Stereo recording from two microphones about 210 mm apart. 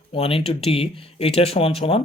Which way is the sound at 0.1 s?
25° left (ahead or behind).